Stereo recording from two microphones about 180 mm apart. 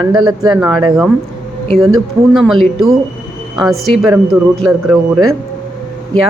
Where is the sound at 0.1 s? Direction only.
25° right (ahead or behind).